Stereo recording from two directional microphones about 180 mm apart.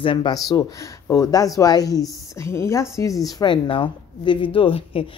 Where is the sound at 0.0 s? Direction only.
25° left (ahead or behind).